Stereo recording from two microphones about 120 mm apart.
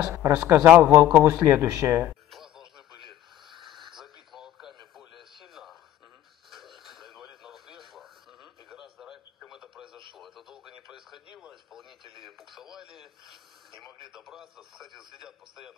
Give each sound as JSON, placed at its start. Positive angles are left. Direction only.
{"t": 0.1, "sound": "a man's voice", "side_deg": -25}
{"t": 2.3, "sound": "radio", "side_deg": -5}